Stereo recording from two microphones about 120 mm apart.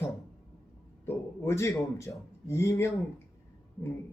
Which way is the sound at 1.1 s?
20° left (ahead or behind).